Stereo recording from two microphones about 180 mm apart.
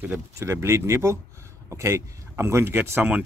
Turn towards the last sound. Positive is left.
turn(degrees=-10)  # may be behind; listen again after turning